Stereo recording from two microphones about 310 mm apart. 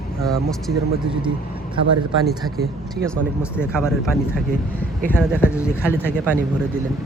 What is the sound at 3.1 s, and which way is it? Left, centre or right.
Speech, centre.